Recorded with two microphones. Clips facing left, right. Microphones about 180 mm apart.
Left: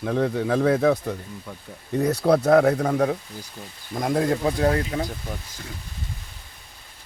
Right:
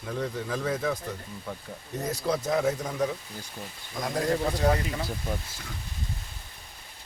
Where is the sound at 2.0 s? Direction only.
65° left (ahead or behind).